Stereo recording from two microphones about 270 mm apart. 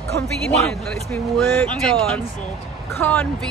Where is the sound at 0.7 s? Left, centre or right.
Centre.